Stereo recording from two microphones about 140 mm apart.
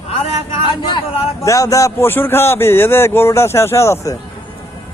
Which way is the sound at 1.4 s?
25° left (ahead or behind).